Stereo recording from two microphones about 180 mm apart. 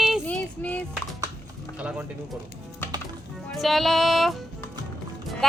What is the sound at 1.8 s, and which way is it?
Speech, 5° right (ahead or behind).